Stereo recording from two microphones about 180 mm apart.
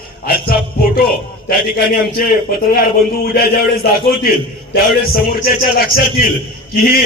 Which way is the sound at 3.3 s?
55° left (ahead or behind).